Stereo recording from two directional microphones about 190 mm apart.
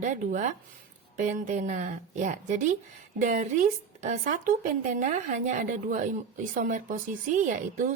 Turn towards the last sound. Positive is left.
turn(degrees=-45)  # may be behind; listen again after turning